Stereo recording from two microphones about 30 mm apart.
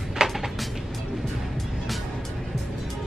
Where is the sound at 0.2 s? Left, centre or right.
Right.